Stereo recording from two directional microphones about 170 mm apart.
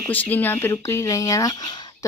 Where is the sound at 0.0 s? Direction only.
10° left (ahead or behind).